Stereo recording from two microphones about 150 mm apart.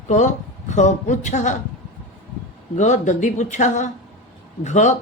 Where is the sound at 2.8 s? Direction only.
55° left (ahead or behind).